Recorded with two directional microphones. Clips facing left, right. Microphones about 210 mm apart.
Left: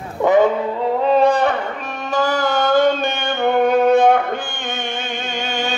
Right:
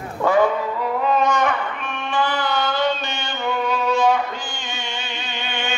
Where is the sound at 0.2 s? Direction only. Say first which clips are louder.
Left 4 dB; 20° left (ahead or behind).